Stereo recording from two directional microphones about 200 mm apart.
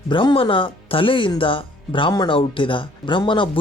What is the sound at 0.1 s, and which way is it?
Speech, 25° left (ahead or behind).